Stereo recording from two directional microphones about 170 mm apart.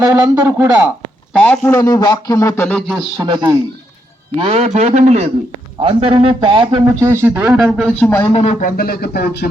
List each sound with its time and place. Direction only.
0.1 s speech: 10° right (ahead or behind)
1.3 s a man's voice: 5° left (ahead or behind)
1.8 s speech: 25° left (ahead or behind)
2.6 s a man's voice: 5° left (ahead or behind)
3.2 s a man's voice: 25° right (ahead or behind)
4.4 s a man's voice: 40° right (ahead or behind); by 8.1 s 5° left (ahead or behind)
8.3 s speech: 40° left (ahead or behind)
8.6 s speech: 60° left (ahead or behind)